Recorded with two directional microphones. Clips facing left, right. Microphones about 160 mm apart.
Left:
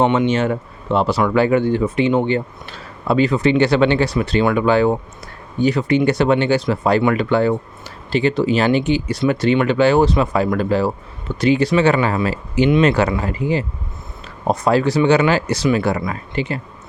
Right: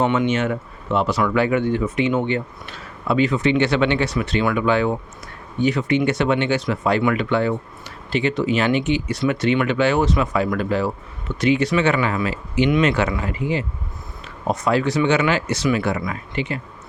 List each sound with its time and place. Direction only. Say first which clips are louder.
0.0 s speech: left 3 dB; 30° left (ahead or behind)